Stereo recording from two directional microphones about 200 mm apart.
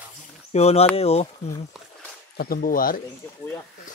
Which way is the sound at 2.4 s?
45° left (ahead or behind).